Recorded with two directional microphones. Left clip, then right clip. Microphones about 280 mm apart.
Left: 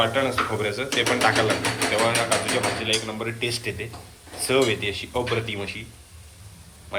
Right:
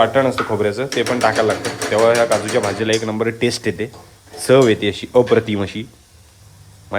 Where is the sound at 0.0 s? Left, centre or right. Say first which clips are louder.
Right 7 dB; right.